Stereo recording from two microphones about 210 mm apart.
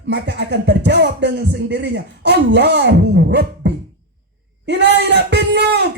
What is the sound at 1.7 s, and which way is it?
Speech, 50° right (ahead or behind).